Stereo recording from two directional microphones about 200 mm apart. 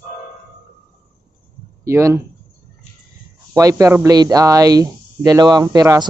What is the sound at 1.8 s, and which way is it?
Speech, 15° right (ahead or behind).